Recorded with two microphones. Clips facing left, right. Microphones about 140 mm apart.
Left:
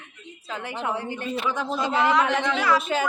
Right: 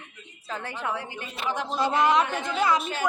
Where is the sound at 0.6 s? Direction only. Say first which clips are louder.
Left 3 dB; 20° left (ahead or behind).